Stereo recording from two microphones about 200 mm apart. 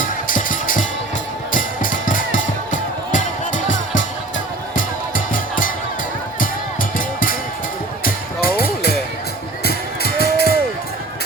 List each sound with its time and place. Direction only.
0.0 s music: 45° left (ahead or behind)
6.9 s music: 45° left (ahead or behind)